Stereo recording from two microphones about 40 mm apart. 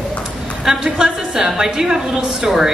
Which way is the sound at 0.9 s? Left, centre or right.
Centre.